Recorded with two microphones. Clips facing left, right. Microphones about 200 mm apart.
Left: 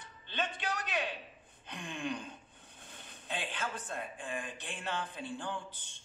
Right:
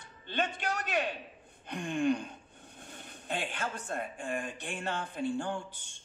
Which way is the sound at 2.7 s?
45° right (ahead or behind).